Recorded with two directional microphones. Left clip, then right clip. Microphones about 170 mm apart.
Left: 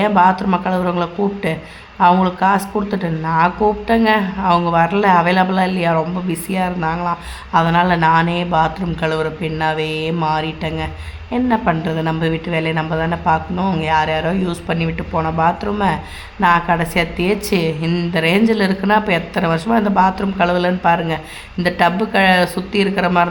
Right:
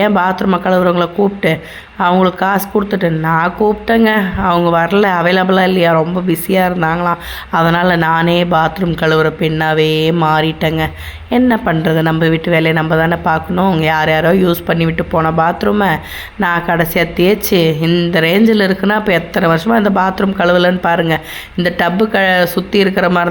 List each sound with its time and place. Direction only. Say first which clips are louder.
0.0 s speech: even; 25° right (ahead or behind)